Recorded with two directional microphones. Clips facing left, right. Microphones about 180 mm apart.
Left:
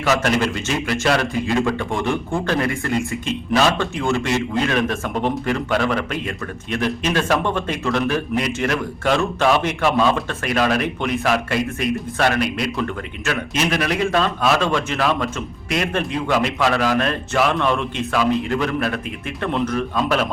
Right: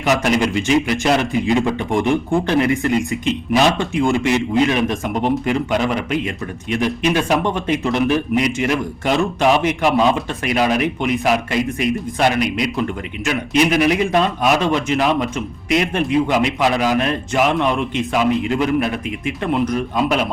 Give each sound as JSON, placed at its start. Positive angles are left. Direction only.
{"t": 0.0, "sound": "speech", "side_deg": -15}